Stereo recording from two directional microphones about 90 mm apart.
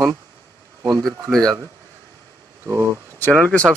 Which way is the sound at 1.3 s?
5° left (ahead or behind).